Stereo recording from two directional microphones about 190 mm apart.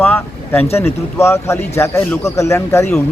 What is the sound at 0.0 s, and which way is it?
Speech, 10° left (ahead or behind).